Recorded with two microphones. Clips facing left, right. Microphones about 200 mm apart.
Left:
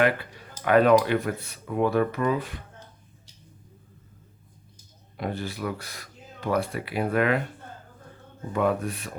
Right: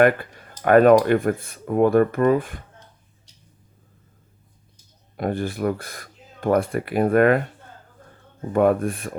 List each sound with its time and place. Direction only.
0.0 s speech: 50° right (ahead or behind)
5.1 s speech: 50° right (ahead or behind)
8.5 s speech: 50° right (ahead or behind)